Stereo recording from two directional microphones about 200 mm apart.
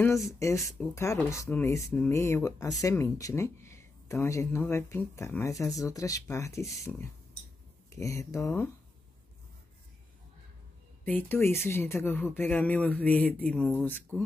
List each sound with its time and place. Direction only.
0.0 s speech: 15° left (ahead or behind)
7.9 s speech: 15° left (ahead or behind)
11.1 s speech: 10° left (ahead or behind)